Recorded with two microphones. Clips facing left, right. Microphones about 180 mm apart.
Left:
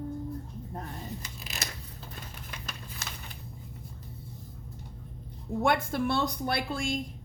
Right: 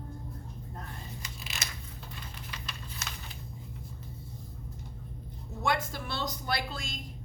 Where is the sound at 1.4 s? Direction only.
40° left (ahead or behind).